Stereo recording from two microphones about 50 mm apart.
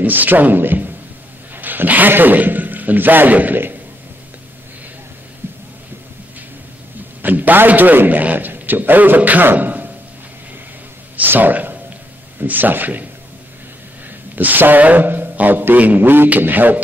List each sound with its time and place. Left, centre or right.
0.0 s mantra: right
1.5 s a man's voice: right
5.4 s music: right
7.2 s a man's voice: right
11.2 s speech: right
12.4 s mantra: right
14.3 s mantra: right